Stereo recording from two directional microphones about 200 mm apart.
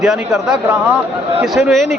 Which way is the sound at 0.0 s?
5° right (ahead or behind).